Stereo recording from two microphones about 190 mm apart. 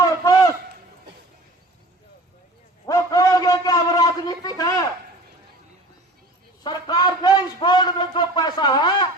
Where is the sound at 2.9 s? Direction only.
15° left (ahead or behind).